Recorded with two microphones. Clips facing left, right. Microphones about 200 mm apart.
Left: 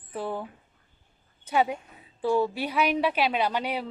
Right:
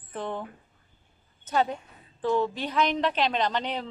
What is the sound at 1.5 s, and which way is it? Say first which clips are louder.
Speech: left 1 dB; 10° left (ahead or behind).